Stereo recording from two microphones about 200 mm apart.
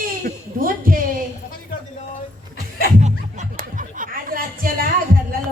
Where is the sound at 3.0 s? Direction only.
40° right (ahead or behind).